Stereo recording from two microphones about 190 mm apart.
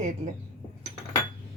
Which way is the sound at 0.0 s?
40° right (ahead or behind).